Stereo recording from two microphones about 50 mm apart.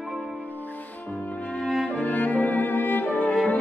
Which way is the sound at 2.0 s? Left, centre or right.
Left.